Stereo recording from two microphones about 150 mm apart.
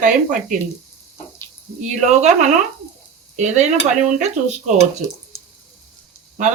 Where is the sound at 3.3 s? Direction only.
50° right (ahead or behind).